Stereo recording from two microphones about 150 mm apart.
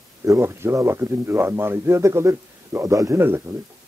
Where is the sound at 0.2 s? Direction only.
20° right (ahead or behind).